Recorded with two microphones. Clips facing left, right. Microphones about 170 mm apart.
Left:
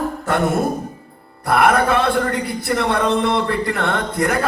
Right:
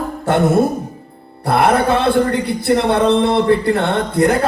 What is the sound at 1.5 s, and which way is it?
Speech, 30° right (ahead or behind).